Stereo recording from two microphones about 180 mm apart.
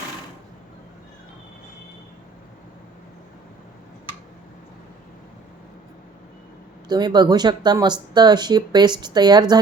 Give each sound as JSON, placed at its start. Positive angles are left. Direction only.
{"t": 6.8, "sound": "speech", "side_deg": -25}